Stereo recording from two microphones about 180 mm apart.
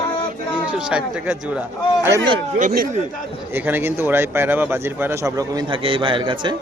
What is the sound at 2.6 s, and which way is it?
Speech, 45° right (ahead or behind).